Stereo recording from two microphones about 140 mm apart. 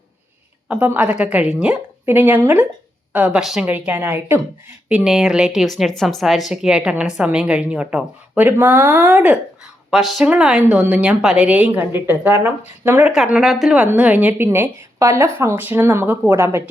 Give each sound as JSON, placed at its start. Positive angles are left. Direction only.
{"t": 0.7, "sound": "a woman's voice", "side_deg": -10}